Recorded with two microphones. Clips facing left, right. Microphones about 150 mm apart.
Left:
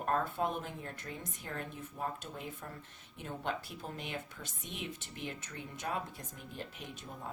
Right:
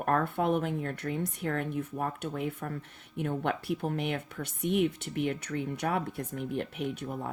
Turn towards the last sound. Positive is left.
turn(degrees=-65)  # may be behind; listen again after turning